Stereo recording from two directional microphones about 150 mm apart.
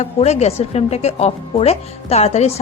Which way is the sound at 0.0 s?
45° left (ahead or behind).